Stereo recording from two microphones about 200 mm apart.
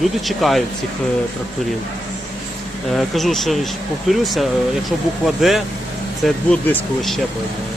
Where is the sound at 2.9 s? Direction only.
Centre (ahead or behind).